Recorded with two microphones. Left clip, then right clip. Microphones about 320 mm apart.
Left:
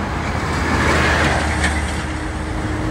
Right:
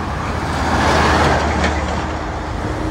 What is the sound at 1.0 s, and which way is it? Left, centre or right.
Vehicle, right.